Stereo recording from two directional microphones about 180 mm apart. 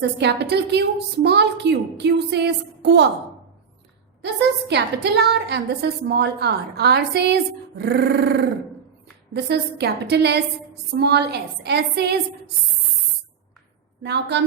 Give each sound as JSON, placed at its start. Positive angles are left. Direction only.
{"t": 0.2, "sound": "a woman's voice", "side_deg": -70}
{"t": 4.7, "sound": "a woman's voice", "side_deg": -70}
{"t": 14.0, "sound": "a woman's voice", "side_deg": -70}